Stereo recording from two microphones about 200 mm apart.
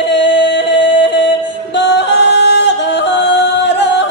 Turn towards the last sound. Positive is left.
turn(degrees=60)  # may be behind; listen again after turning